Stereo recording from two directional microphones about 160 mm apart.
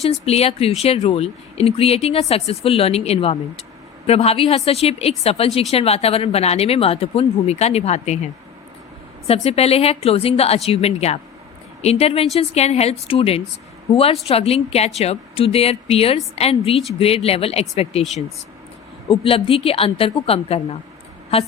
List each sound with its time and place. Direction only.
0.0 s a woman's voice: 40° left (ahead or behind)
9.2 s a woman's voice: 40° left (ahead or behind)
19.2 s a woman's voice: 35° left (ahead or behind)